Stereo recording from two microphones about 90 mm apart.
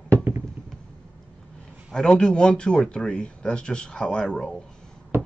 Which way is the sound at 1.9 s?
10° left (ahead or behind).